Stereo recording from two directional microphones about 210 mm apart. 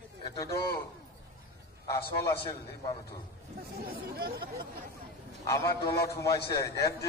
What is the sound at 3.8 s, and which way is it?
Speech, 45° right (ahead or behind).